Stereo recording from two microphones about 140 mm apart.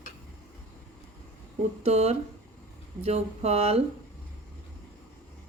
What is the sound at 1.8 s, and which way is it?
Speech, 50° right (ahead or behind).